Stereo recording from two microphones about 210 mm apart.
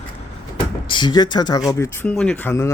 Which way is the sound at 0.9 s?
20° left (ahead or behind).